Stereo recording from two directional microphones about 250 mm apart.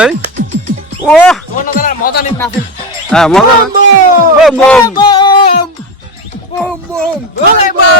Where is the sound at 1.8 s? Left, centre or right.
Left.